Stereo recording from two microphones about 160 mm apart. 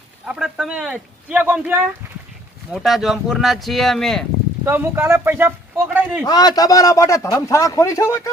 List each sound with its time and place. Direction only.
0.3 s speech: 5° right (ahead or behind)
4.6 s speech: 15° right (ahead or behind)
6.2 s a man's voice: 25° left (ahead or behind)